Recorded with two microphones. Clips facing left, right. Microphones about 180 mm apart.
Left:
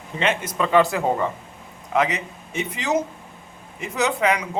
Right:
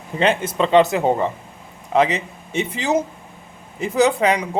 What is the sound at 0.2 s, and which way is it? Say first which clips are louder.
A man's voice: right 5 dB; 30° right (ahead or behind).